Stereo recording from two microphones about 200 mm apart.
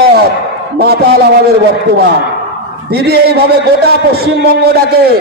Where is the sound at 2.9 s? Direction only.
50° right (ahead or behind).